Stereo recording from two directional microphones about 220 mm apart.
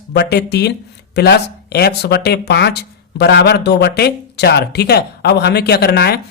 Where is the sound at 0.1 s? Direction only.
50° left (ahead or behind).